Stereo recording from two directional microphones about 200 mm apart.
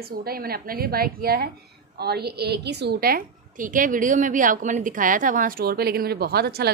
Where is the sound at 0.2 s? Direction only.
50° right (ahead or behind).